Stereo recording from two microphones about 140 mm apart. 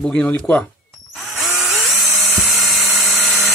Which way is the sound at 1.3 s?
Centre (ahead or behind).